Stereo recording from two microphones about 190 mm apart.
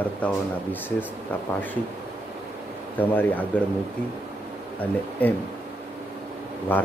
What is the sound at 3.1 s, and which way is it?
Speech, 10° left (ahead or behind).